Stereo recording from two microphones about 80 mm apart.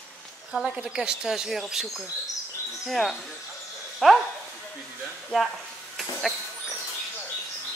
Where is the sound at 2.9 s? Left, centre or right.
Centre.